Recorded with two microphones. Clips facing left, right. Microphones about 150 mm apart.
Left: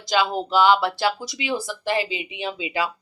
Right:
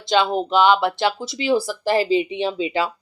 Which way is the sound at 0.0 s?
25° right (ahead or behind).